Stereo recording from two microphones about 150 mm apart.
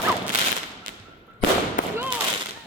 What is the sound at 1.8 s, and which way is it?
Gunshot, 60° left (ahead or behind).